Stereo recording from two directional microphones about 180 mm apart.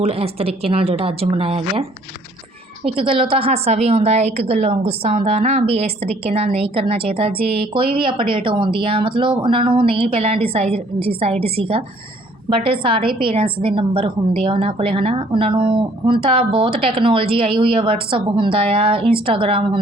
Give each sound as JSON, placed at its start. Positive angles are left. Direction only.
{"t": 0.0, "sound": "a woman's voice", "side_deg": -35}
{"t": 2.8, "sound": "a woman's voice", "side_deg": -30}